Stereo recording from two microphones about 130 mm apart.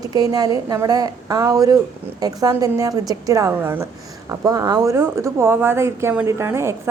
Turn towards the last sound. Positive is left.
turn(degrees=-20)  # may be behind; listen again after turning